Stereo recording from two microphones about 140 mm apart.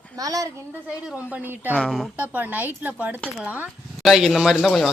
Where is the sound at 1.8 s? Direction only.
5° left (ahead or behind).